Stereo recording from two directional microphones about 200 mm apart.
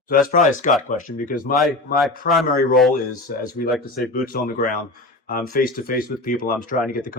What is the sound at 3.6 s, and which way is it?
Speech, 40° left (ahead or behind).